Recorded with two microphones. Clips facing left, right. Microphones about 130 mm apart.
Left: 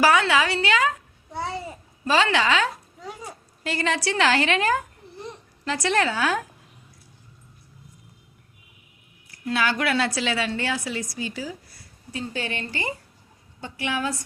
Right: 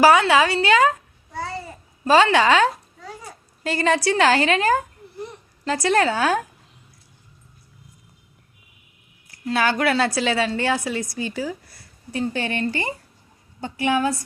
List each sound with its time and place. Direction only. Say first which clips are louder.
0.0 s a woman's voice: right 4 dB; 30° right (ahead or behind)
1.3 s babbling: even; 20° left (ahead or behind)
2.0 s a woman's voice: right 6 dB; 45° right (ahead or behind)
9.5 s a woman's voice: right 3 dB; 40° right (ahead or behind)